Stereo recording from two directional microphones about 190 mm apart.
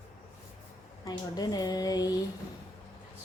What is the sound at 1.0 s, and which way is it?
Speech, 20° left (ahead or behind).